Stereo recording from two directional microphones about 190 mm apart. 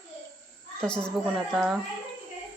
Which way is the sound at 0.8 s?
5° left (ahead or behind).